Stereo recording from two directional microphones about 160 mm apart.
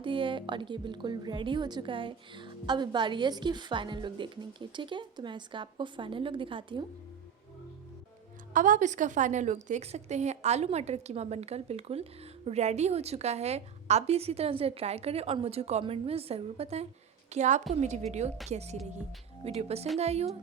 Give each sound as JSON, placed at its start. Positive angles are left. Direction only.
{"t": 0.0, "sound": "a woman's voice", "side_deg": -30}
{"t": 8.5, "sound": "a woman's voice", "side_deg": -55}